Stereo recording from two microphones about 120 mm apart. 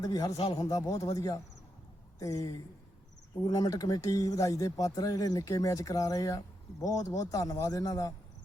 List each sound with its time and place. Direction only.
0.0 s speech: 30° left (ahead or behind)